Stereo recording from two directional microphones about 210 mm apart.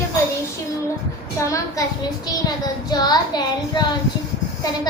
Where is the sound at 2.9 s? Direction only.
20° left (ahead or behind).